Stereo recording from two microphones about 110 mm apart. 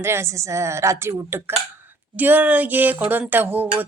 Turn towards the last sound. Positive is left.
turn(degrees=-15)  # may be behind; listen again after turning